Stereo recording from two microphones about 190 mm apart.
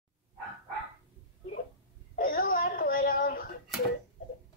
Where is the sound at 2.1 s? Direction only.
50° left (ahead or behind).